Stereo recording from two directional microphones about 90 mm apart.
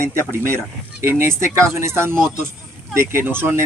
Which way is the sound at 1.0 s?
25° right (ahead or behind).